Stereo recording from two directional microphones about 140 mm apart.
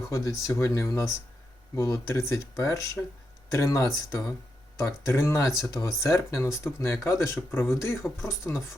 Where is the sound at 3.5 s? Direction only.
20° left (ahead or behind).